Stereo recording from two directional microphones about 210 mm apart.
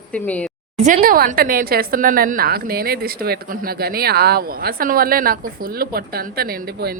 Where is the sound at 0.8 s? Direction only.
35° right (ahead or behind).